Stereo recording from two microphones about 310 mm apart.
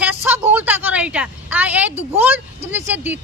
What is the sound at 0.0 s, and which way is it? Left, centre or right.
A woman's voice, centre.